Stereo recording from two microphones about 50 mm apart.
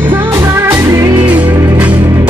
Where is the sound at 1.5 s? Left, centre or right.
Right.